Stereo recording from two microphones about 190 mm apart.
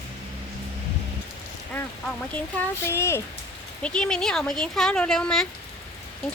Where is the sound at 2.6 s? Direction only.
15° left (ahead or behind).